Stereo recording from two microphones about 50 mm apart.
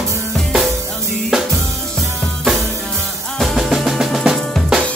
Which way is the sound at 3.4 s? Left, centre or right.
Centre.